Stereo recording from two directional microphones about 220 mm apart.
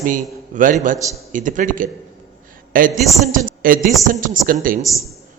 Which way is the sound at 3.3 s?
40° right (ahead or behind).